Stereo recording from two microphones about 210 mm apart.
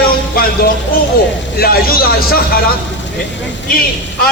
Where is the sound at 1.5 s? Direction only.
45° left (ahead or behind).